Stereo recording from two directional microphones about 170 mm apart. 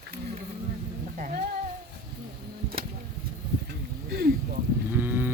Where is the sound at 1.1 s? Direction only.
50° right (ahead or behind).